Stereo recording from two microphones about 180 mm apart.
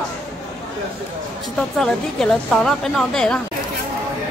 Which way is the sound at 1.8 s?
5° left (ahead or behind).